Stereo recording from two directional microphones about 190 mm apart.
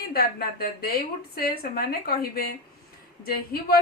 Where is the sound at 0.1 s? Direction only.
50° left (ahead or behind).